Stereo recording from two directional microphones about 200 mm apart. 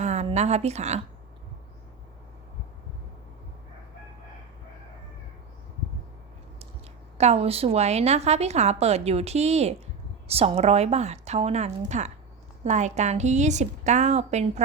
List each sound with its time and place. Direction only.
0.0 s a woman's voice: 35° right (ahead or behind)
7.2 s a woman's voice: 30° right (ahead or behind)